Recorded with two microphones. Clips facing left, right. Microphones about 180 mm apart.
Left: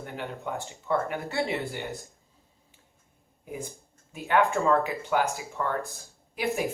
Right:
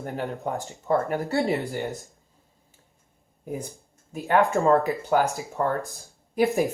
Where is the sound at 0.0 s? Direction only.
35° right (ahead or behind).